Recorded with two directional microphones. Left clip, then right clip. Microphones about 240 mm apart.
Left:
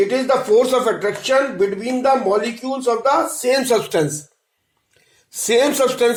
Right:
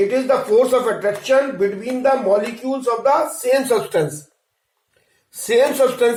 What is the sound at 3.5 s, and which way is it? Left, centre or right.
Speech, left.